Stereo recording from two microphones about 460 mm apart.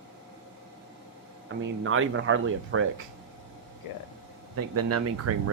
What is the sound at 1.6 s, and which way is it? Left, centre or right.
Speech, right.